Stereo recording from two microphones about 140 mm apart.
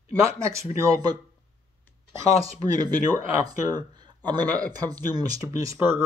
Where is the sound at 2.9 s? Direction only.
25° right (ahead or behind).